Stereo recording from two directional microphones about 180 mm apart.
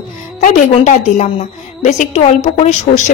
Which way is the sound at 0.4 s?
45° left (ahead or behind).